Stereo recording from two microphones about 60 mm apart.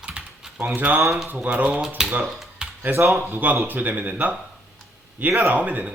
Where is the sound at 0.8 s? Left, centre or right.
Right.